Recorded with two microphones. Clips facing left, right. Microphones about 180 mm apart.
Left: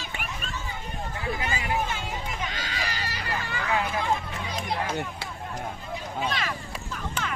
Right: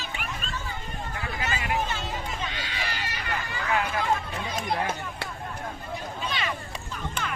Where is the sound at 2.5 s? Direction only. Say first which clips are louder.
Left 1 dB; 40° left (ahead or behind).